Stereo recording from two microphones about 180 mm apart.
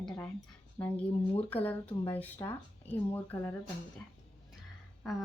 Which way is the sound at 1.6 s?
10° left (ahead or behind).